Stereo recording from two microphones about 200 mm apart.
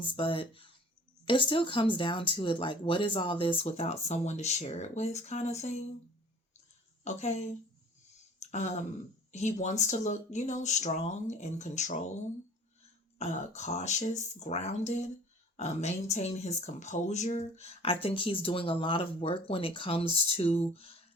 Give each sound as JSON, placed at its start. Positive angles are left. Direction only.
{"t": 0.0, "sound": "speech", "side_deg": 25}
{"t": 7.0, "sound": "speech", "side_deg": 35}
{"t": 8.4, "sound": "a sound", "side_deg": 35}
{"t": 9.3, "sound": "speech", "side_deg": 35}
{"t": 13.1, "sound": "speech", "side_deg": 35}